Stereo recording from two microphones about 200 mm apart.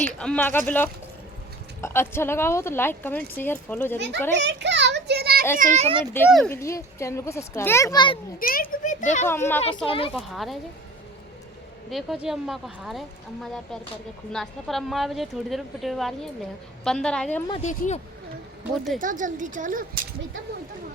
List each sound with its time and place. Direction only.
0.2 s speech: 5° left (ahead or behind)
3.9 s a child's voice: 60° right (ahead or behind)
4.4 s children playing: 60° right (ahead or behind)
5.5 s a woman's voice: 35° right (ahead or behind)
6.2 s a woman's voice: centre (ahead or behind)
6.5 s speech: 15° left (ahead or behind)
8.4 s a child's voice: 45° left (ahead or behind)
9.2 s speech: 10° left (ahead or behind)
9.8 s speech: 25° left (ahead or behind)
10.2 s a woman's voice: centre (ahead or behind)
11.9 s a woman's voice: centre (ahead or behind)
17.5 s a child's voice: 35° left (ahead or behind)
18.9 s a woman's voice: 40° right (ahead or behind)